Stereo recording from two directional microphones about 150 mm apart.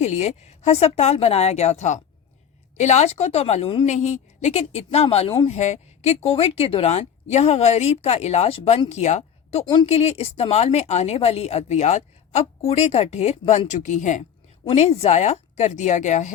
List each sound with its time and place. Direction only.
0.0 s speech: 50° left (ahead or behind)
3.8 s a woman's voice: 50° left (ahead or behind)